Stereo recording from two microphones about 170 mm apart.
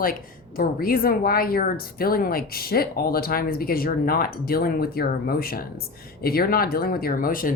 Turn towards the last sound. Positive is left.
turn(degrees=55)  # may be behind; listen again after turning